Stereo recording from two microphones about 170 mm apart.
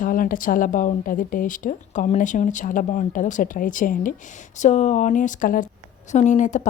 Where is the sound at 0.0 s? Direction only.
55° left (ahead or behind).